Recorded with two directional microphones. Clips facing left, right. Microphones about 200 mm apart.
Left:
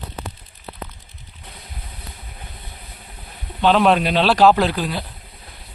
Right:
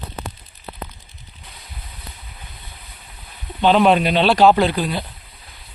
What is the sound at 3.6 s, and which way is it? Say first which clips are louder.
Speech: right 1 dB; centre (ahead or behind).